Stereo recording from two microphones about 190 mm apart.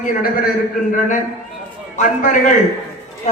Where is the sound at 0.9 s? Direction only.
40° left (ahead or behind).